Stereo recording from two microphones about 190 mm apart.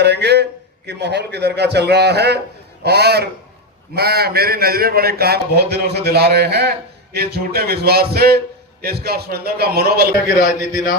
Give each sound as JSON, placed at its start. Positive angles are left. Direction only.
{"t": 0.0, "sound": "a man's voice", "side_deg": -60}